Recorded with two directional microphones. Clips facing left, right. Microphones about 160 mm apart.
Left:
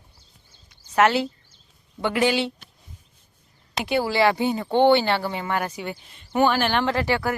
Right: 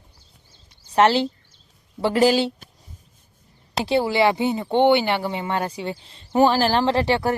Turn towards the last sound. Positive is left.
turn(degrees=-30)  # may be behind; listen again after turning